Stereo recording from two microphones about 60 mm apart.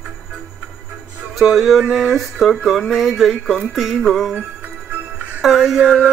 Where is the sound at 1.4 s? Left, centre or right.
Centre.